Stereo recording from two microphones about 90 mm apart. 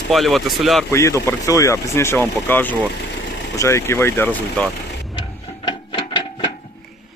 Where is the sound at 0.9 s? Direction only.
30° left (ahead or behind).